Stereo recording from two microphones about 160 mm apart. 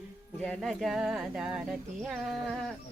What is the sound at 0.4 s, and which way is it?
Music, 5° left (ahead or behind).